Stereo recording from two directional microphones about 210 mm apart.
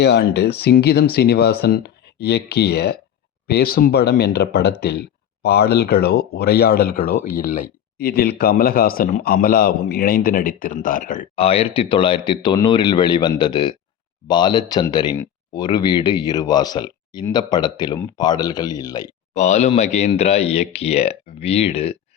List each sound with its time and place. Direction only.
0.0 s a man's voice: 50° left (ahead or behind)
11.3 s speech: 25° left (ahead or behind)
19.3 s speech: 35° left (ahead or behind)